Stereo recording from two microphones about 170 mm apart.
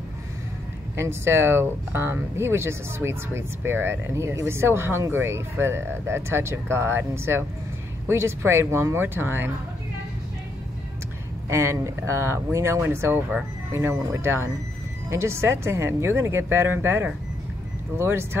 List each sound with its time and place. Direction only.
0.9 s speech: 15° right (ahead or behind)
11.4 s speech: 15° right (ahead or behind)